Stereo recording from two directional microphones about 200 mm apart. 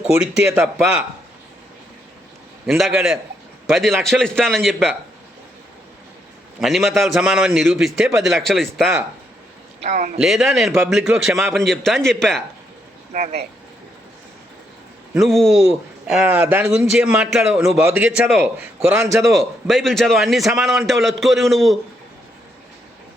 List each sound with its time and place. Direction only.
0.1 s a man's voice: 5° right (ahead or behind)
2.6 s a man's voice: centre (ahead or behind)
6.6 s a man's voice: centre (ahead or behind)
9.8 s a man's voice: 35° right (ahead or behind)
10.2 s a man's voice: centre (ahead or behind)
13.1 s a man's voice: 40° right (ahead or behind)
15.2 s a man's voice: centre (ahead or behind)
19.2 s a man's voice: centre (ahead or behind)